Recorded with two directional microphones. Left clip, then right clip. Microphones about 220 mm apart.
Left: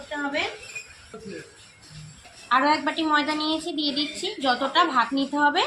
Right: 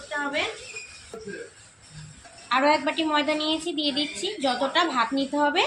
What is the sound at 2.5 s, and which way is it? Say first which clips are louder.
A woman's voice: left 1 dB; 10° left (ahead or behind).